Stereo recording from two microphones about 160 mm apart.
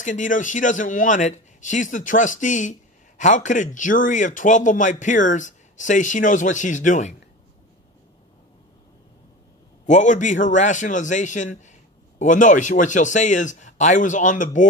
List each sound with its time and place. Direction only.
0.0 s speech: 50° left (ahead or behind)
9.8 s speech: 50° left (ahead or behind)